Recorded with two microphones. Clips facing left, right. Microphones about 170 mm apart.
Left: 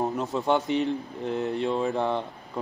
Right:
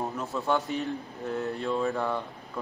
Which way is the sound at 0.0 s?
20° left (ahead or behind).